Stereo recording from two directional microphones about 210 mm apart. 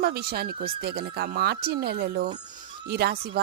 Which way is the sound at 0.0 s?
45° right (ahead or behind).